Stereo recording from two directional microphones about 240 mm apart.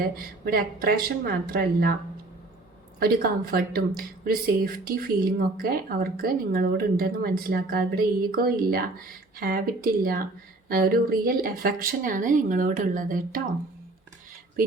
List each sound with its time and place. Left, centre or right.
0.4 s speech: right
3.0 s speech: right